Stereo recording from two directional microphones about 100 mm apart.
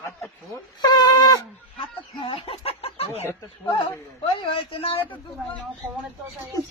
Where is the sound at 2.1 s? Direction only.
60° left (ahead or behind); by 3.2 s 80° left.